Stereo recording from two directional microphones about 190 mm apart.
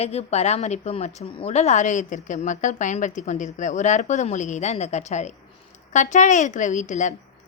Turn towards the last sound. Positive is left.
turn(degrees=40)  # may be behind; listen again after turning